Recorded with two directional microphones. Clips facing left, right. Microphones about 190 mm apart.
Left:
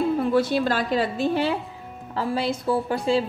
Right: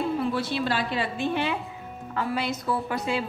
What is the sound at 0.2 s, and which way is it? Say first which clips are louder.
A woman's voice: left 6 dB; 45° left (ahead or behind).